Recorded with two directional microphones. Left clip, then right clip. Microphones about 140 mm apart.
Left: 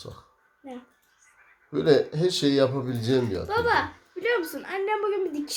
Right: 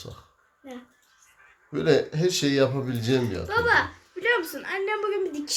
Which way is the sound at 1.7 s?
5° right (ahead or behind).